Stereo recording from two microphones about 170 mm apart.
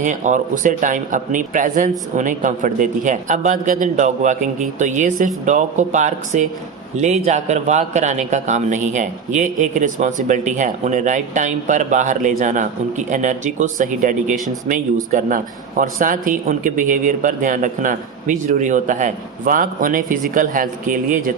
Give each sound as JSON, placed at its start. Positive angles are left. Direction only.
{"t": 0.0, "sound": "speech", "side_deg": -45}